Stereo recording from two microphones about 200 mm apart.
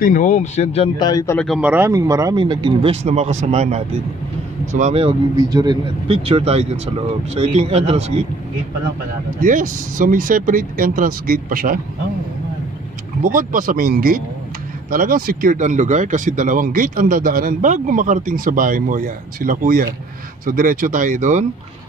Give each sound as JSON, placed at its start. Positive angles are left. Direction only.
{"t": 0.0, "sound": "speech", "side_deg": 40}
{"t": 0.9, "sound": "a man's voice", "side_deg": 20}
{"t": 1.4, "sound": "speech", "side_deg": -5}
{"t": 9.4, "sound": "speech", "side_deg": -40}
{"t": 13.2, "sound": "speech", "side_deg": -45}